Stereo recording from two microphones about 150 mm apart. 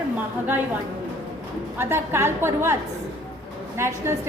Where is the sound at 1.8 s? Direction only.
15° right (ahead or behind).